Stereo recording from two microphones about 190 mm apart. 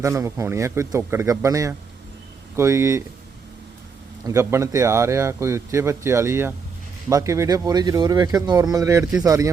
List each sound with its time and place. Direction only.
0.0 s speech: 15° right (ahead or behind)
4.3 s speech: 15° right (ahead or behind)